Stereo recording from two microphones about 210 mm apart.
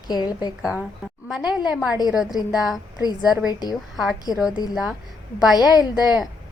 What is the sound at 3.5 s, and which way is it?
Speech, 20° left (ahead or behind).